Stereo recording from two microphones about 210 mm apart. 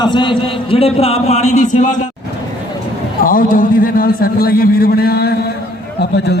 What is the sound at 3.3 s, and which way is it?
A man's voice, 40° left (ahead or behind).